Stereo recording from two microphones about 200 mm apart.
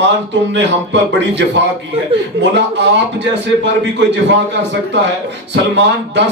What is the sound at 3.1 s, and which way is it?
A man's voice, 60° right (ahead or behind).